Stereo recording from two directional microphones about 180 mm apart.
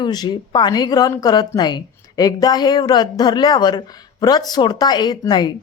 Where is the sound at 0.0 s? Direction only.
25° left (ahead or behind).